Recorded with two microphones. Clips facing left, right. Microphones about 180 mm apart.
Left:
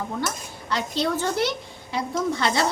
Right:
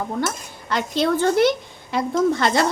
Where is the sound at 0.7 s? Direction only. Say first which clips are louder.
Right 4 dB; 55° right (ahead or behind).